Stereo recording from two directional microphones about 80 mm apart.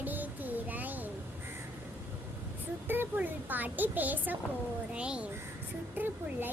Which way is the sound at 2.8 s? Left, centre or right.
Right.